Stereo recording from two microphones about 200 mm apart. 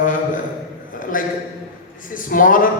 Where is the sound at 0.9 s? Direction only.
45° left (ahead or behind).